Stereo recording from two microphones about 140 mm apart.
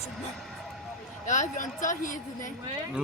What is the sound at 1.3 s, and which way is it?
A woman's voice, 65° left (ahead or behind).